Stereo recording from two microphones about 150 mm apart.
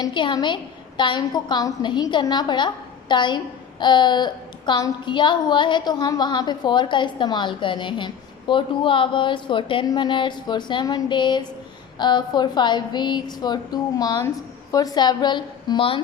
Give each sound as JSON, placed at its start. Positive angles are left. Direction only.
{"t": 0.0, "sound": "a woman's voice", "side_deg": 30}